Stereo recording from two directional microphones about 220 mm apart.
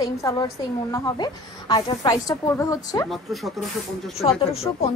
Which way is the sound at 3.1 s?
Centre (ahead or behind).